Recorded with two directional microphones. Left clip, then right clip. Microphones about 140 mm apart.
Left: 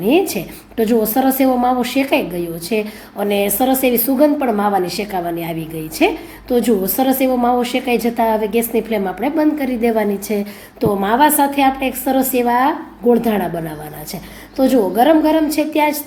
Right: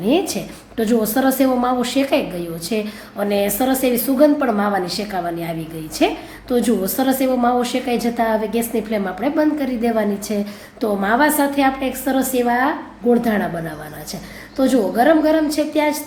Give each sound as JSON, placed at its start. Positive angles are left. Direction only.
{"t": 0.0, "sound": "a woman's voice", "side_deg": 15}